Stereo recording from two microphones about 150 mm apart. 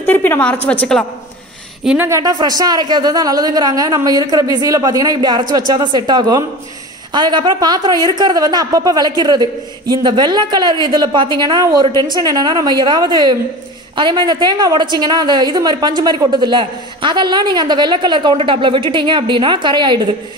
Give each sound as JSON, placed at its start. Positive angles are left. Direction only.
{"t": 0.0, "sound": "a woman's voice", "side_deg": 10}
{"t": 1.9, "sound": "a woman's voice", "side_deg": -15}